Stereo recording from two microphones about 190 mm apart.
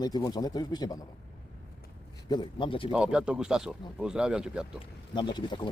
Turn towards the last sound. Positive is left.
turn(degrees=25)  # may be behind; listen again after turning